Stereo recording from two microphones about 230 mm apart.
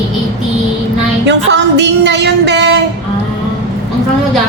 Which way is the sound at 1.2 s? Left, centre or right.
Right.